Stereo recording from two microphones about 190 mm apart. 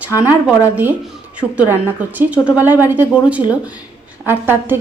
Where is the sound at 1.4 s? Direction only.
5° right (ahead or behind).